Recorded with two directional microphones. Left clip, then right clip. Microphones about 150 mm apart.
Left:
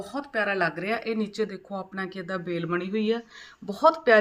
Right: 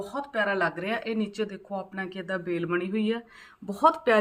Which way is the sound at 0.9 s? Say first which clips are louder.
Left 2 dB; 5° right (ahead or behind).